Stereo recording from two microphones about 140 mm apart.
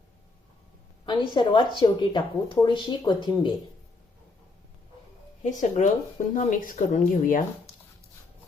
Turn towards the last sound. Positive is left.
turn(degrees=65)  # may be behind; listen again after turning